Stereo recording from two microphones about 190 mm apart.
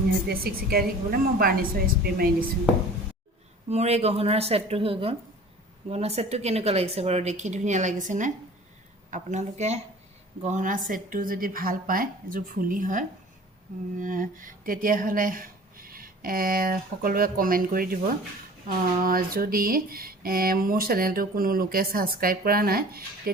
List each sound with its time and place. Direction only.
0.3 s speech: 50° right (ahead or behind)
3.7 s speech: 35° right (ahead or behind); by 23.3 s 50° right (ahead or behind)